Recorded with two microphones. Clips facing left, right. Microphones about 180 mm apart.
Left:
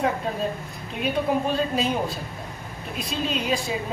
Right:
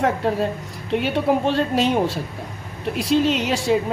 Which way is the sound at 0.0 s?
75° right (ahead or behind).